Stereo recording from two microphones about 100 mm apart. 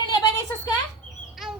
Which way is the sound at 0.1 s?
45° left (ahead or behind).